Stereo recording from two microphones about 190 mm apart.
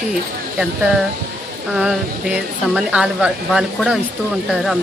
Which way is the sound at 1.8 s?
5° right (ahead or behind).